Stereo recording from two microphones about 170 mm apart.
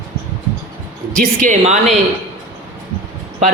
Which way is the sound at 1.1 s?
50° right (ahead or behind).